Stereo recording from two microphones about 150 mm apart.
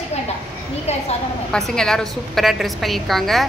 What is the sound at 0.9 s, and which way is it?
Speech, 45° left (ahead or behind).